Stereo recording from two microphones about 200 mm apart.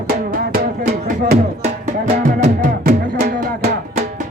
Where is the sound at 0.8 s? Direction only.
45° right (ahead or behind).